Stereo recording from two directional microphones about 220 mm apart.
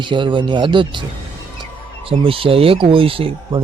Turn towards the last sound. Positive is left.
turn(degrees=-25)  # may be behind; listen again after turning